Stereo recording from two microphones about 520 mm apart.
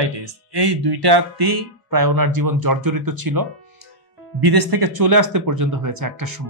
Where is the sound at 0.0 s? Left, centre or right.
Right.